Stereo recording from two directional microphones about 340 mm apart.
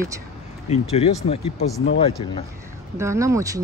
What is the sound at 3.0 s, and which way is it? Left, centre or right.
Speech, centre.